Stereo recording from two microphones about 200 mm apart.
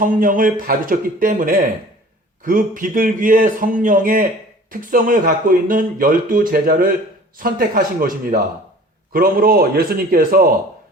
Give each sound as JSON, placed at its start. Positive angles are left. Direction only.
{"t": 0.0, "sound": "speech", "side_deg": -45}